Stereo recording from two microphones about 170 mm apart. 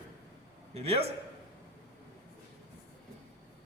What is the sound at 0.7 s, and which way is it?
Speech, 35° right (ahead or behind).